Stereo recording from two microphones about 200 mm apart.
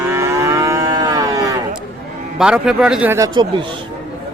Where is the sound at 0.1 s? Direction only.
15° right (ahead or behind).